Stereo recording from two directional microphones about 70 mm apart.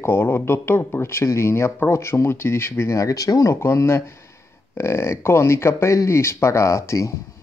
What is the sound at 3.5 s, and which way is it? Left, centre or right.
Speech, left.